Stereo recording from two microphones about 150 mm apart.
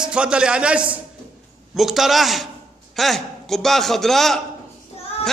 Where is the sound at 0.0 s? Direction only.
5° right (ahead or behind).